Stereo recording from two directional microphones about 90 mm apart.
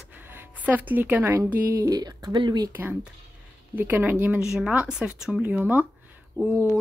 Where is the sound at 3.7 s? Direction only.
20° right (ahead or behind).